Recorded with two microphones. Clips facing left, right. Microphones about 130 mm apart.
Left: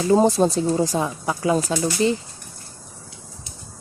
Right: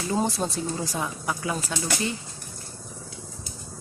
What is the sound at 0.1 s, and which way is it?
Speech, 35° left (ahead or behind).